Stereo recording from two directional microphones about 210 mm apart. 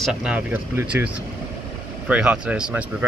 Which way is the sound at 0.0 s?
5° right (ahead or behind).